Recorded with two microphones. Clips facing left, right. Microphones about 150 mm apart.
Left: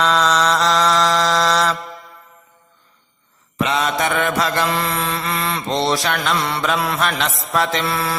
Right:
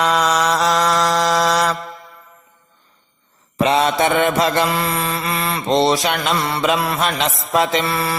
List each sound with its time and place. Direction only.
0.0 s mantra: 10° right (ahead or behind)
3.6 s mantra: 30° right (ahead or behind)
4.6 s mantra: 10° right (ahead or behind)
5.6 s mantra: 20° right (ahead or behind)
6.3 s mantra: 5° right (ahead or behind)
7.0 s mantra: 20° right (ahead or behind)
7.9 s mantra: 5° right (ahead or behind)